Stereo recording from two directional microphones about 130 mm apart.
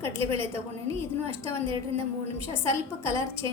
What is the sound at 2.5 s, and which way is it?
Speech, 20° left (ahead or behind).